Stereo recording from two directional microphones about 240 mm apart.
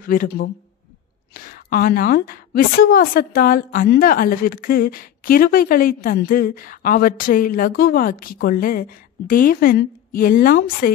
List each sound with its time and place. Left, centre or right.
0.0 s a woman's voice: left